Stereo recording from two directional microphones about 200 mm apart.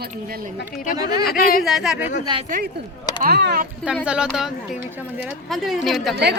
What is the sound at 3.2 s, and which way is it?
Speech, 55° right (ahead or behind).